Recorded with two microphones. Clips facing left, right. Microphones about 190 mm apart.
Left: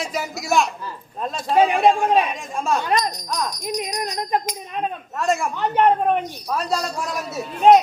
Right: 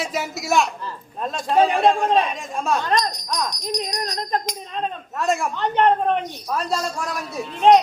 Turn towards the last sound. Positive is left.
turn(degrees=5)  # may be behind; listen again after turning